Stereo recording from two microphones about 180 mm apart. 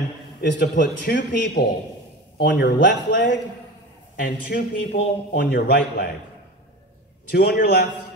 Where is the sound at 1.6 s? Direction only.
65° left (ahead or behind).